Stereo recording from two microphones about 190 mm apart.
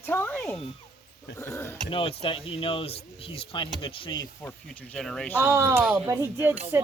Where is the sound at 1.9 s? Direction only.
30° left (ahead or behind).